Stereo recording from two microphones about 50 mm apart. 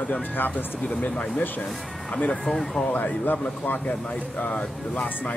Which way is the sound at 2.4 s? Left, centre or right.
Centre.